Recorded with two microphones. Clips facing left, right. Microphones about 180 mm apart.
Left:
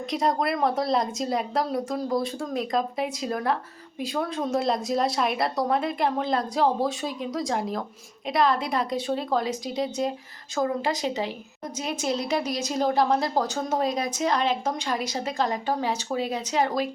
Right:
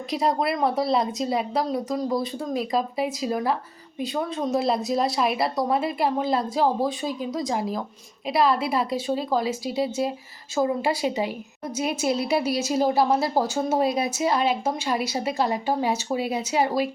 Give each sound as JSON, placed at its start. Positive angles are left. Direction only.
{"t": 0.1, "sound": "a woman's voice", "side_deg": 0}